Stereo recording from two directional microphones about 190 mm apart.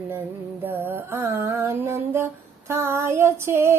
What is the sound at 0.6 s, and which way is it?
Female singing, 10° right (ahead or behind).